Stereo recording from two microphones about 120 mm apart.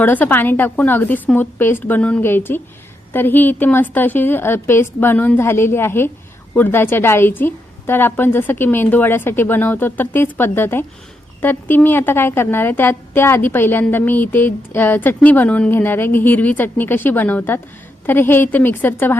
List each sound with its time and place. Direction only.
0.0 s a woman's voice: 15° left (ahead or behind)